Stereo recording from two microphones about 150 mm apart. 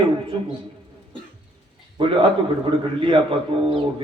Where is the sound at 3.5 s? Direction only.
35° right (ahead or behind).